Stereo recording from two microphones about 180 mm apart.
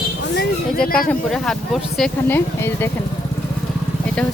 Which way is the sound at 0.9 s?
55° left (ahead or behind).